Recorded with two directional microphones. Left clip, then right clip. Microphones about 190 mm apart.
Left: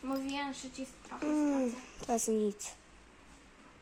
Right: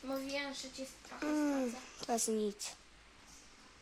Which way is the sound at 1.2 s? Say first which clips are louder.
Left 3 dB; 5° left (ahead or behind).